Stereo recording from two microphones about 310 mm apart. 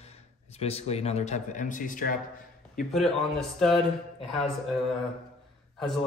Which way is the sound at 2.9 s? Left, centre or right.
Centre.